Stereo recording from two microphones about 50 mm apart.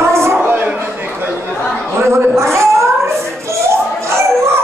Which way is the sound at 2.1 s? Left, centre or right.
Right.